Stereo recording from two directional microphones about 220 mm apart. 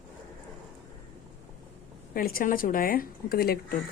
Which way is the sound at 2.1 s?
40° left (ahead or behind).